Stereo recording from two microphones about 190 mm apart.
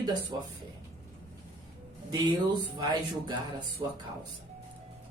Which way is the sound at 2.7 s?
20° right (ahead or behind).